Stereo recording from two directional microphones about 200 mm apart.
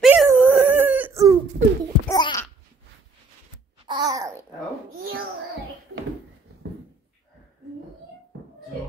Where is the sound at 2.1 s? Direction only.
20° left (ahead or behind).